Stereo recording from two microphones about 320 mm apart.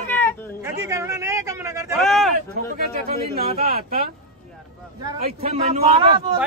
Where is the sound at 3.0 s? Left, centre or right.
Right.